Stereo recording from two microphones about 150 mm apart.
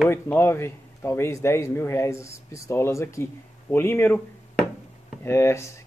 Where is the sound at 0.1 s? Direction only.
15° left (ahead or behind).